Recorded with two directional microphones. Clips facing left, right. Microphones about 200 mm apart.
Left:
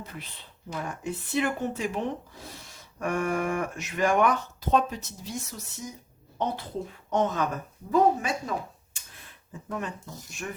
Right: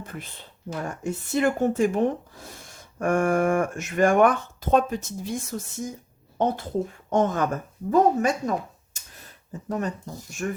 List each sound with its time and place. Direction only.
0.0 s a sound: 50° right (ahead or behind)
0.9 s speech: 45° right (ahead or behind)
7.1 s speech: 50° right (ahead or behind)